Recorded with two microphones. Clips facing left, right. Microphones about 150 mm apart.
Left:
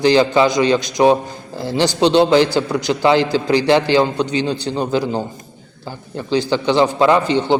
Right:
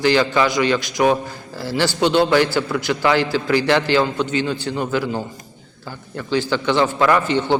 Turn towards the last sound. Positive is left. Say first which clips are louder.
# left 3 dB
turn(degrees=15)  # may be behind; listen again after turning